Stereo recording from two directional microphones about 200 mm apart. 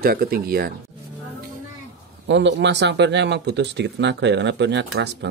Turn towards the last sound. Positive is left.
turn(degrees=-60)  # may be behind; listen again after turning